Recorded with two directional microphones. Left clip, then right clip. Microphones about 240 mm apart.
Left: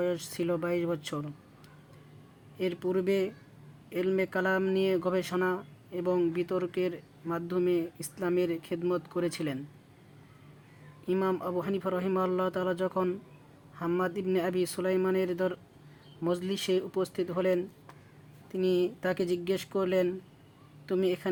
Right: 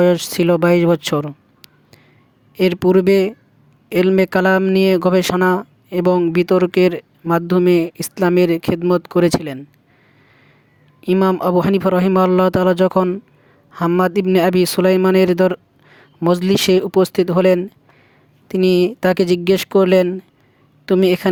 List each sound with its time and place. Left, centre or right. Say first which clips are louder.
0.0 s speech: right 17 dB; right
11.0 s a woman's voice: right 14 dB; right